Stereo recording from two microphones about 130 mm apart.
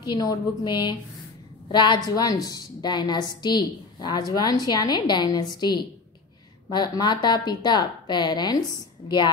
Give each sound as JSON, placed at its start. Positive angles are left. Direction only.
{"t": 0.0, "sound": "a woman's voice", "side_deg": 30}